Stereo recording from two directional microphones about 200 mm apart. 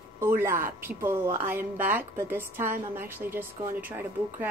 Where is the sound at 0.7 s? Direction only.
10° right (ahead or behind).